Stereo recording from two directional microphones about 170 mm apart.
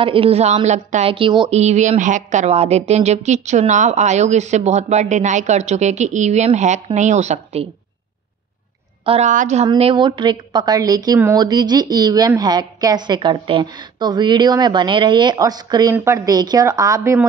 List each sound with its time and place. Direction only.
0.0 s a woman's voice: 30° right (ahead or behind)
1.5 s a woman's voice: 40° right (ahead or behind)
9.0 s a woman's voice: 35° right (ahead or behind)
9.3 s a woman's voice: 45° right (ahead or behind)
9.7 s a woman's voice: 30° right (ahead or behind)